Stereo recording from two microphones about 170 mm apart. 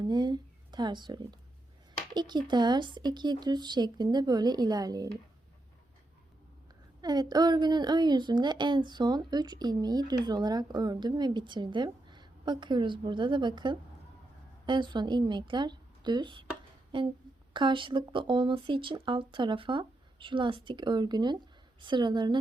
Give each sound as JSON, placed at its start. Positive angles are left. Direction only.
{"t": 0.0, "sound": "a sound", "side_deg": -25}
{"t": 2.1, "sound": "speech", "side_deg": -25}
{"t": 7.0, "sound": "speech", "side_deg": -25}